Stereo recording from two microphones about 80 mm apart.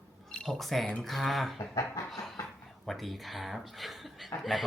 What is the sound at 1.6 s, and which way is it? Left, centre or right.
Speech, left.